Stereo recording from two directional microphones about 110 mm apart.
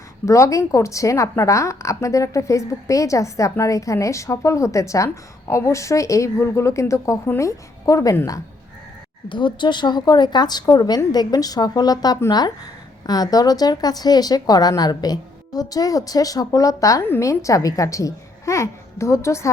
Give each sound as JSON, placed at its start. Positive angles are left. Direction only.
{"t": 0.3, "sound": "a woman's voice", "side_deg": 30}
{"t": 9.3, "sound": "a woman's voice", "side_deg": 45}